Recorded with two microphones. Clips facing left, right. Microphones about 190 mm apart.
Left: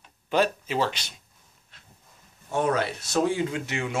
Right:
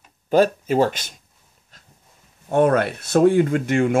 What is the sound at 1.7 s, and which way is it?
Dog, 40° right (ahead or behind).